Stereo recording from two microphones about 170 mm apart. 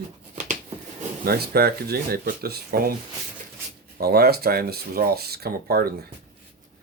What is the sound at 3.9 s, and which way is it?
Speech, 65° right (ahead or behind).